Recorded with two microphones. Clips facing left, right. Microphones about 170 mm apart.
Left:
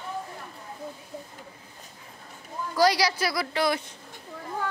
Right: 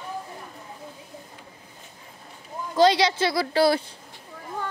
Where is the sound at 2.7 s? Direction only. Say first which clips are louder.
Right 4 dB; 25° right (ahead or behind).